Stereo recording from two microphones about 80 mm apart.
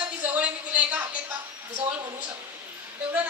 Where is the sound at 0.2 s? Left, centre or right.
Centre.